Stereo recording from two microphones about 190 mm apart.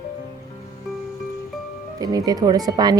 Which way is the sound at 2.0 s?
20° right (ahead or behind).